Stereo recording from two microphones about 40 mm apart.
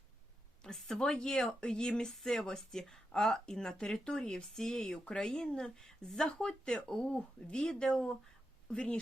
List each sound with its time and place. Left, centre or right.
0.6 s speech: centre